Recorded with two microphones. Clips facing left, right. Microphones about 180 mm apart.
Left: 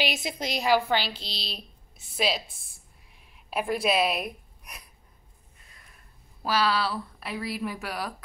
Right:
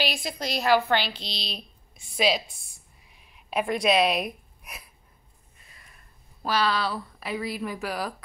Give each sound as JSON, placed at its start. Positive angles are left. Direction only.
{"t": 0.0, "sound": "a woman's voice", "side_deg": 20}
{"t": 3.4, "sound": "a woman's voice", "side_deg": 5}
{"t": 6.4, "sound": "speech", "side_deg": 5}